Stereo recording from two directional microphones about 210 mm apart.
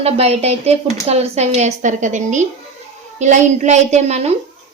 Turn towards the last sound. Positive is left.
turn(degrees=-30)  # may be behind; listen again after turning